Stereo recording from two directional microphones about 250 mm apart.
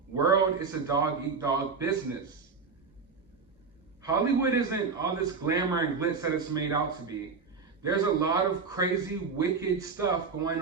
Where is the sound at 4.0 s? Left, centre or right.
Centre.